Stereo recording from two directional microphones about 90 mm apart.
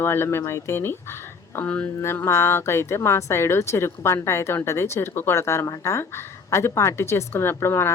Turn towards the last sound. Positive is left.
turn(degrees=30)  # may be behind; listen again after turning